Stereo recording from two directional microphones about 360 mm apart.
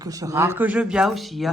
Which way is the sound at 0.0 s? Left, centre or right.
Centre.